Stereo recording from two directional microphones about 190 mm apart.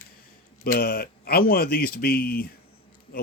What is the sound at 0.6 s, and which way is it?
Speech, 50° left (ahead or behind).